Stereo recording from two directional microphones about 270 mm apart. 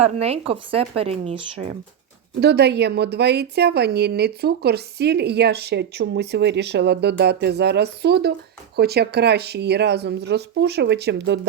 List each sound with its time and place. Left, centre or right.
0.0 s speech: right
2.4 s a woman's voice: right